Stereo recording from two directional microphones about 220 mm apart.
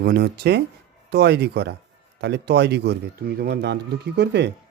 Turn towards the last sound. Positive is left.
turn(degrees=-50)  # may be behind; listen again after turning